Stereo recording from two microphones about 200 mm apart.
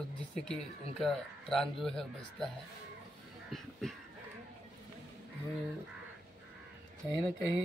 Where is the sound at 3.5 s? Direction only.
Centre (ahead or behind).